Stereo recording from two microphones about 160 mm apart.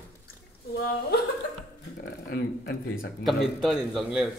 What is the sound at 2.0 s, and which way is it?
Speech, 80° left.